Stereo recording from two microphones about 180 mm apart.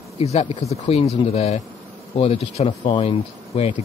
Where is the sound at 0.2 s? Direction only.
35° left (ahead or behind).